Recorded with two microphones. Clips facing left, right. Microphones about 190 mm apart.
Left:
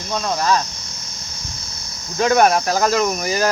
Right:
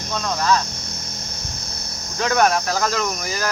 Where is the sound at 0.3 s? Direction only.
15° left (ahead or behind).